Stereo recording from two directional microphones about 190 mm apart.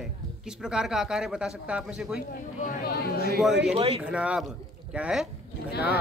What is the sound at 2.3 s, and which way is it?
Speech, 55° left (ahead or behind).